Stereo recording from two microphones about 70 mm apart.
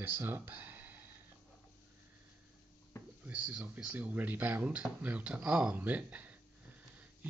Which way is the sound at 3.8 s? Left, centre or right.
Right.